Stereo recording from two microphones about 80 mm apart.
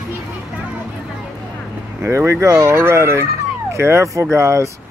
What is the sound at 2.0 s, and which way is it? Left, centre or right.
Fowl, right.